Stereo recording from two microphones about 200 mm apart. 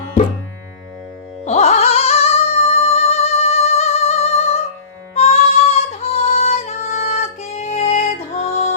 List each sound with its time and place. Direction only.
0.2 s music: 40° left (ahead or behind)
1.5 s music: 35° left (ahead or behind)